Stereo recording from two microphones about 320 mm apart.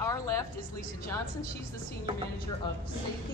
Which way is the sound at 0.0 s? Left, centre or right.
Centre.